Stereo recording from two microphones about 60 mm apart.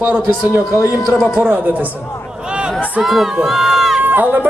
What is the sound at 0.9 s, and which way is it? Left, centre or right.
Speech, left.